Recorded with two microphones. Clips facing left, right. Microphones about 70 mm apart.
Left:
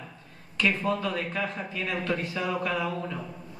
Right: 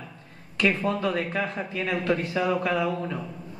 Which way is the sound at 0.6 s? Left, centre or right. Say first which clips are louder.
Right 2 dB; right.